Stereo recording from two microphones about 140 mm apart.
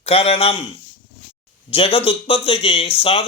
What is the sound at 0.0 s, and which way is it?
Speech, 45° left (ahead or behind).